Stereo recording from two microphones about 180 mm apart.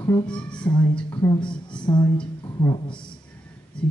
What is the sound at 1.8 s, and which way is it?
Speech, 25° left (ahead or behind).